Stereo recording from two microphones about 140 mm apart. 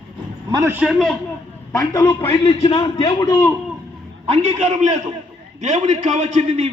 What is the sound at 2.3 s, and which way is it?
Speech, 40° left (ahead or behind).